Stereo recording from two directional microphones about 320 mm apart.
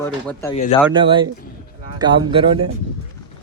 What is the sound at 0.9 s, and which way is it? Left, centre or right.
Speech, centre.